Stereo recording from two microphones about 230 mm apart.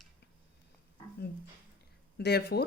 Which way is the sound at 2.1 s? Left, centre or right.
Left.